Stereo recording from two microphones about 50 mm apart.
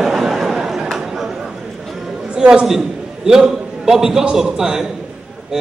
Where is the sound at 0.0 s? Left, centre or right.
Centre.